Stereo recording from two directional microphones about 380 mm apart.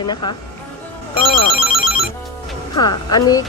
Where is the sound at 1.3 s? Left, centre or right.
Left.